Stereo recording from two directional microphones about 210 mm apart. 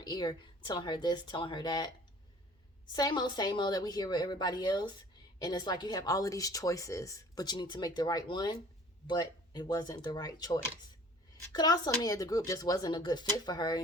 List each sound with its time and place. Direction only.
0.0 s speech: 20° left (ahead or behind)
2.9 s speech: 20° left (ahead or behind)